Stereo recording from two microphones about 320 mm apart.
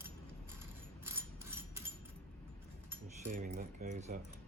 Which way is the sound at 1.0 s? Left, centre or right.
Centre.